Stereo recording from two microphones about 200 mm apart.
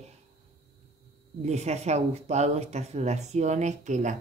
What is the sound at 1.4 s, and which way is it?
A woman's voice, 35° right (ahead or behind).